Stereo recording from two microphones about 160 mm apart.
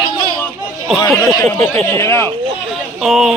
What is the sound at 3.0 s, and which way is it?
Speech, centre (ahead or behind).